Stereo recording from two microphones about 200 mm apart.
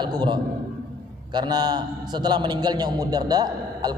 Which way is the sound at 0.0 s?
20° right (ahead or behind).